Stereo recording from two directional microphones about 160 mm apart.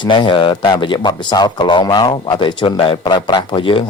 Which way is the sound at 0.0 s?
30° left (ahead or behind).